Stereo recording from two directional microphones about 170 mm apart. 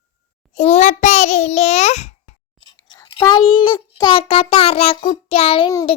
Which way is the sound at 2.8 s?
20° left (ahead or behind).